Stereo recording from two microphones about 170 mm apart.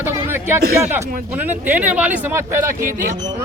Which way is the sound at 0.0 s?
15° right (ahead or behind).